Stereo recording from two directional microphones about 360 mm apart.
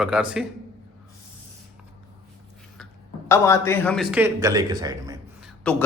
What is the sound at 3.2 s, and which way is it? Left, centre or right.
A man's voice, centre.